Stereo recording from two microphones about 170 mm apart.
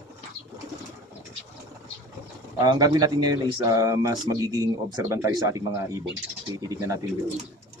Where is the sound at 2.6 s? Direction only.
25° right (ahead or behind).